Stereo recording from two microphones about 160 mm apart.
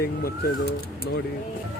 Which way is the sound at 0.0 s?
70° left (ahead or behind).